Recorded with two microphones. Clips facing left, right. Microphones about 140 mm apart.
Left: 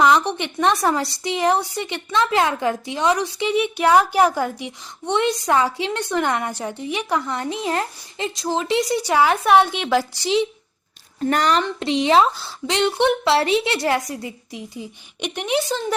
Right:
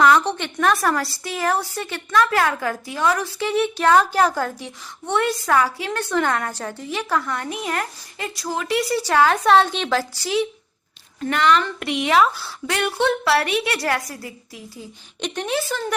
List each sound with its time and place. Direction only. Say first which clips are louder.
0.0 s a sound: even; 15° left (ahead or behind)
0.6 s a woman's voice: left 1 dB; 20° left (ahead or behind)
11.2 s a woman's voice: even; 40° left (ahead or behind)
11.6 s speech: left 4 dB; 25° left (ahead or behind)